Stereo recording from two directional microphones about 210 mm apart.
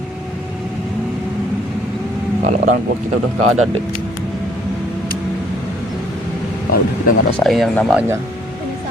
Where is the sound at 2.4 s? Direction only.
35° right (ahead or behind).